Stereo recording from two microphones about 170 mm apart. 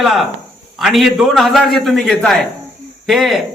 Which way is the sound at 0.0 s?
Centre (ahead or behind).